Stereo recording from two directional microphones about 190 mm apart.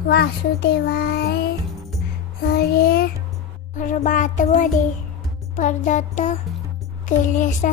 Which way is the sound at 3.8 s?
40° left (ahead or behind).